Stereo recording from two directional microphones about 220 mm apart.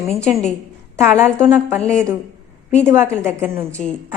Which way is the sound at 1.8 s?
5° left (ahead or behind).